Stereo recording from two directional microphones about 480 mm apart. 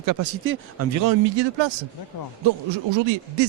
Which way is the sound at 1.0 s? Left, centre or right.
Right.